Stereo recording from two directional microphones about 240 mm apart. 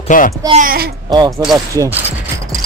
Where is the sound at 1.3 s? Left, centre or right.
Centre.